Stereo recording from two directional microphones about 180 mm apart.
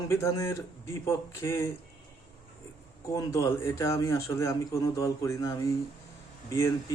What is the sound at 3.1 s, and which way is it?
A man's voice, 15° left (ahead or behind).